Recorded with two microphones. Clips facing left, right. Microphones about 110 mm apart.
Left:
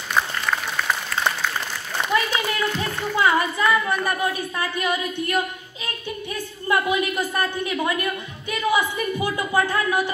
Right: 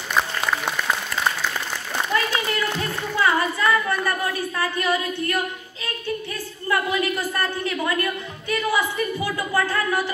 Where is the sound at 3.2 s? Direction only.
15° left (ahead or behind).